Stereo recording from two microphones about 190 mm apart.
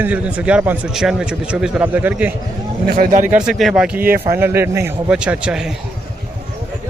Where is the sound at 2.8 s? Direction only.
45° right (ahead or behind).